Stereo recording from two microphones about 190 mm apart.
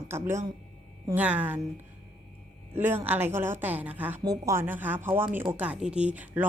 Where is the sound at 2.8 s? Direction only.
10° right (ahead or behind).